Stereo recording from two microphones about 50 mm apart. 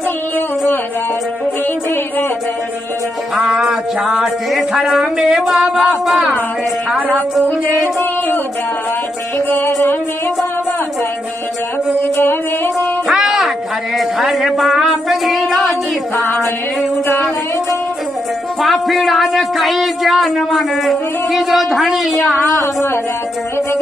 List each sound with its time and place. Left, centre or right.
3.3 s music: centre
4.9 s speech: centre
12.0 s music: left
13.1 s music: centre
18.6 s speech: centre